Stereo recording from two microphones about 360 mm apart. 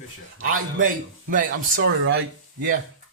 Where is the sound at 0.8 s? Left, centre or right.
Right.